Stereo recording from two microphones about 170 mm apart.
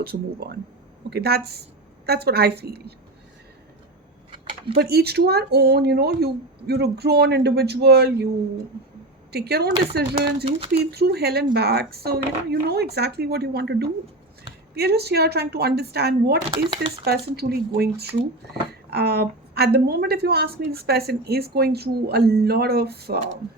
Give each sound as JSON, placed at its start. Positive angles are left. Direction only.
{"t": 0.0, "sound": "a woman's voice", "side_deg": -65}
{"t": 4.3, "sound": "a sound", "side_deg": -30}
{"t": 4.8, "sound": "a woman's voice", "side_deg": -70}
{"t": 9.3, "sound": "a woman's voice", "side_deg": -70}
{"t": 10.4, "sound": "speech", "side_deg": -35}
{"t": 10.9, "sound": "a woman's voice", "side_deg": -70}